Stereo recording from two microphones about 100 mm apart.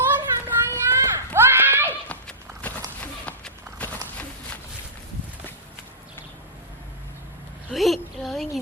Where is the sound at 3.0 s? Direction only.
15° left (ahead or behind).